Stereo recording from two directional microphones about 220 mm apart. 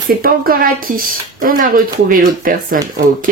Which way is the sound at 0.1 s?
40° right (ahead or behind).